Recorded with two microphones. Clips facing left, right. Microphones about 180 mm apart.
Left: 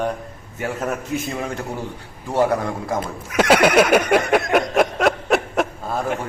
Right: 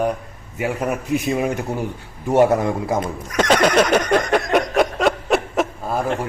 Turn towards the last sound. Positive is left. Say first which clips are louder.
# right 1 dB
turn(degrees=-5)  # may be behind; listen again after turning